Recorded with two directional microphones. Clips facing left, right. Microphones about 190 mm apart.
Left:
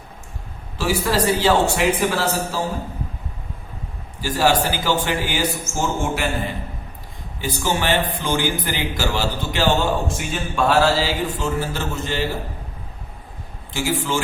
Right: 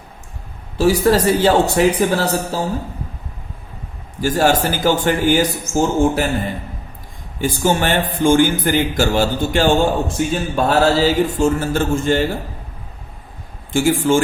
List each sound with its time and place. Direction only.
0.8 s speech: 40° right (ahead or behind)
4.2 s speech: 50° right (ahead or behind)
7.4 s speech: 50° right (ahead or behind)
13.7 s speech: 50° right (ahead or behind)